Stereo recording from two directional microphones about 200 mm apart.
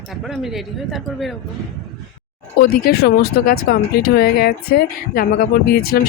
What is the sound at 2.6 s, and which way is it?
Speech, 50° left (ahead or behind).